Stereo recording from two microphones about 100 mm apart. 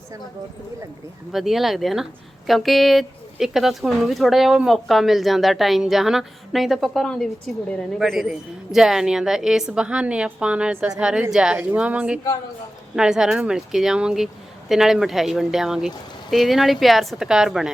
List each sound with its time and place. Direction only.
1.3 s a woman's voice: centre (ahead or behind)